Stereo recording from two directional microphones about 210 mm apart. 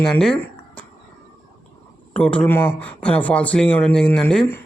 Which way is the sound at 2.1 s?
5° left (ahead or behind).